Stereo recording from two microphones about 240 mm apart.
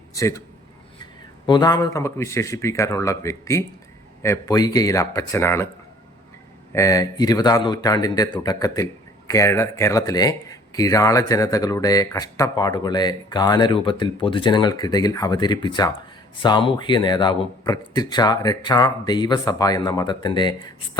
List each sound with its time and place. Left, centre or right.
0.1 s a man's voice: centre
1.5 s a man's voice: centre
6.7 s a man's voice: centre